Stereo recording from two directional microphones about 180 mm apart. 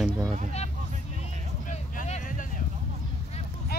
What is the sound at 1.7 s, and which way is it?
Vehicle, 40° left (ahead or behind).